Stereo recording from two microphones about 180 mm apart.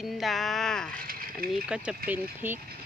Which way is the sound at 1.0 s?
50° right (ahead or behind).